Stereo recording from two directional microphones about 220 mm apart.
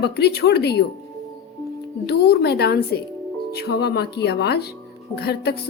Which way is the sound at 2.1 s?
45° left (ahead or behind).